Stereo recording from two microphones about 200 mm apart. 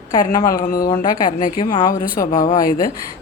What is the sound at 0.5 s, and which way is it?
Speech, 45° left (ahead or behind).